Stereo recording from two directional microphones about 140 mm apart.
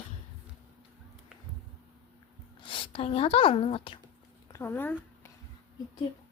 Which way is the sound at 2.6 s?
40° left (ahead or behind).